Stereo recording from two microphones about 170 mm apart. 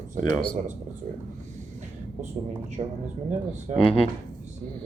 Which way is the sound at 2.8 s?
35° right (ahead or behind).